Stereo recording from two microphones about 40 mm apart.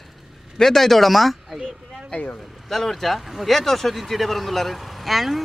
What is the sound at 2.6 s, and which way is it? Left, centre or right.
Speech, centre.